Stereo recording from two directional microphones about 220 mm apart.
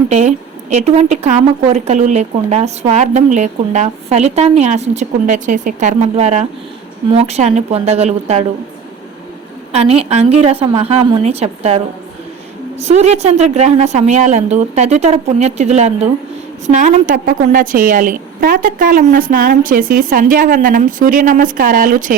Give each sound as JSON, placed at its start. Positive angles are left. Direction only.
{"t": 0.1, "sound": "a woman's voice", "side_deg": -30}
{"t": 9.7, "sound": "a woman's voice", "side_deg": -25}
{"t": 12.8, "sound": "a woman's voice", "side_deg": -30}